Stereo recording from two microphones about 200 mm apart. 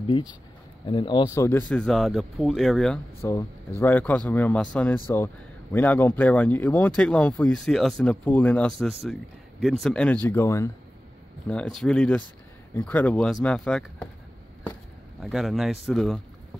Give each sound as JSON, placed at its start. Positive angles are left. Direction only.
{"t": 0.0, "sound": "speech", "side_deg": 25}
{"t": 15.2, "sound": "speech", "side_deg": 0}